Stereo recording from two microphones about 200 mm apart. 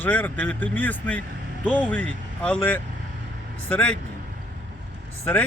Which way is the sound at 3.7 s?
5° left (ahead or behind).